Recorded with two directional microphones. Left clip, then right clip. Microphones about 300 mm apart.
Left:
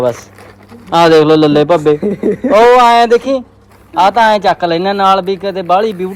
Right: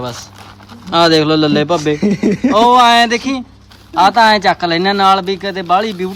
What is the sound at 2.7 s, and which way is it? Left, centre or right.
Speech, centre.